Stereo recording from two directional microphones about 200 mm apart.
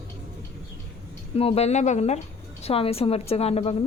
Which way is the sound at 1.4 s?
30° left (ahead or behind).